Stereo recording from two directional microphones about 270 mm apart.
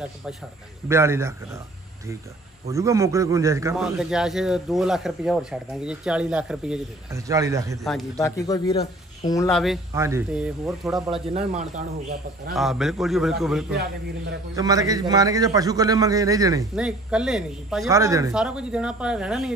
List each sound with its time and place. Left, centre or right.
0.8 s a man's voice: centre
2.7 s a man's voice: centre
7.8 s a man's voice: centre
8.2 s speech: centre
9.5 s a man's voice: centre
9.9 s a man's voice: centre
11.3 s speech: right
12.5 s a man's voice: centre
14.5 s a man's voice: centre